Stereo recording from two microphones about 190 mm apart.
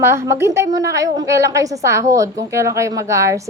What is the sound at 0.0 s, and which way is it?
A woman's voice, 15° right (ahead or behind).